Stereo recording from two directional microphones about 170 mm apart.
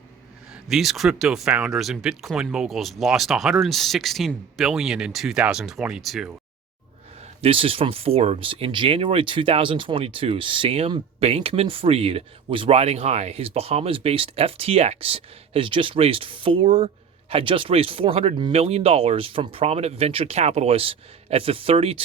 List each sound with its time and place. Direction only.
0.7 s speech: centre (ahead or behind)
7.2 s speech: 35° right (ahead or behind)